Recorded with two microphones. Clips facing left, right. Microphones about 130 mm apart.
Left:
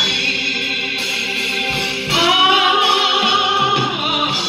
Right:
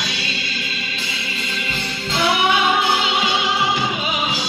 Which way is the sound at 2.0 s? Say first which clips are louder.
Left 2 dB; 70° left (ahead or behind).